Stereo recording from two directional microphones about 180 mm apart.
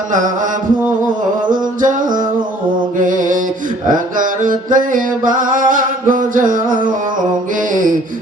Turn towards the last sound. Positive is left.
turn(degrees=-45)  # may be behind; listen again after turning